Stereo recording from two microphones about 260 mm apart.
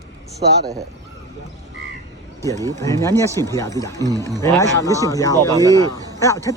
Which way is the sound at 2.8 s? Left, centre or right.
Centre.